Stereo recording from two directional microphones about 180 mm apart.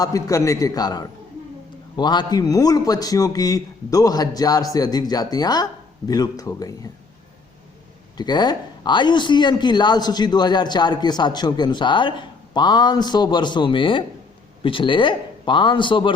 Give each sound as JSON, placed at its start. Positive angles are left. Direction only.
{"t": 0.0, "sound": "speech", "side_deg": 20}
{"t": 8.2, "sound": "speech", "side_deg": 25}